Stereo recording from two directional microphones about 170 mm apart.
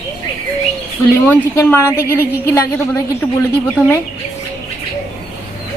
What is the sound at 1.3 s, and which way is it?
A woman's voice, 15° left (ahead or behind).